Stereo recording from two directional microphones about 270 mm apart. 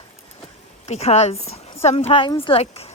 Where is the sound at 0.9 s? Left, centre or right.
Left.